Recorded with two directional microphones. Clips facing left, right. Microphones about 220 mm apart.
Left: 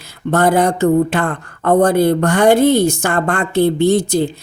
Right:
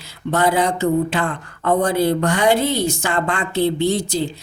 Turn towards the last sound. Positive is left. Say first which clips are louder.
# left 6 dB
turn(degrees=50)  # may be behind; listen again after turning